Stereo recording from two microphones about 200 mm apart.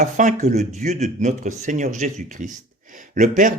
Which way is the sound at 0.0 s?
40° right (ahead or behind).